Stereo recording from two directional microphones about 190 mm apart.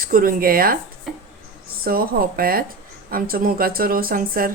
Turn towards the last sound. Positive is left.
turn(degrees=-50)  # may be behind; listen again after turning